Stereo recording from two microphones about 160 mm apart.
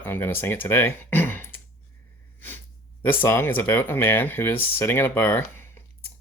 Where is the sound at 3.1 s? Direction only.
15° left (ahead or behind).